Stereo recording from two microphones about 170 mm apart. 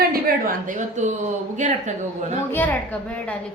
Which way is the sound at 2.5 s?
10° left (ahead or behind).